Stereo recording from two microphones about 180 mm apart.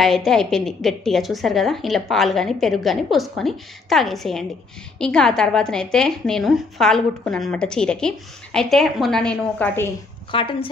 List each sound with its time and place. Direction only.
0.0 s a woman's voice: centre (ahead or behind)
10.3 s a woman's voice: 30° left (ahead or behind)